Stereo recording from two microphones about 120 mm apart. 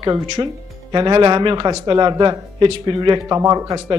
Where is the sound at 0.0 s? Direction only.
35° right (ahead or behind).